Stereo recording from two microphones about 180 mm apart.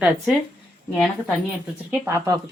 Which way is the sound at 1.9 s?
15° right (ahead or behind).